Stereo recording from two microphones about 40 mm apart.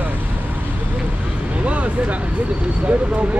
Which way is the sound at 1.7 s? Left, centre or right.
Right.